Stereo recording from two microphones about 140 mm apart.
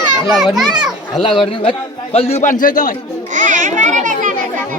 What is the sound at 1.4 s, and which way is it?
A man's voice, 35° left (ahead or behind).